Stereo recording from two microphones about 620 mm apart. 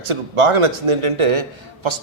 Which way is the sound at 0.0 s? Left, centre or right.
Right.